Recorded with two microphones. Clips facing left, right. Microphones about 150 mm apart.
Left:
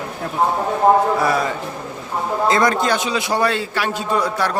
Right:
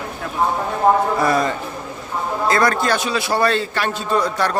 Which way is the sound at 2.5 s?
20° left (ahead or behind).